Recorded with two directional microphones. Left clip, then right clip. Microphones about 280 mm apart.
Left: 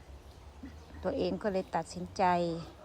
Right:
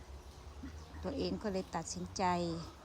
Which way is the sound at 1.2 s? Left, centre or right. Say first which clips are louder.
Left 5 dB; centre.